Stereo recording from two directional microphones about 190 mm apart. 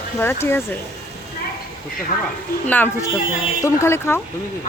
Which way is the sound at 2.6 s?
10° left (ahead or behind).